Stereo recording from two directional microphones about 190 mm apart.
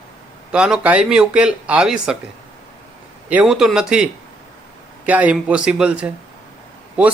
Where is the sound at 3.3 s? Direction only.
5° right (ahead or behind).